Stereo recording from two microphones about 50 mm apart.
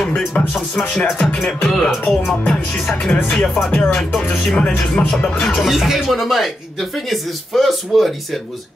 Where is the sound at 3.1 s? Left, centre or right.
Left.